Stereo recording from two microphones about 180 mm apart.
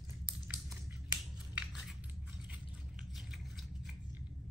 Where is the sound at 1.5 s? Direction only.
5° right (ahead or behind).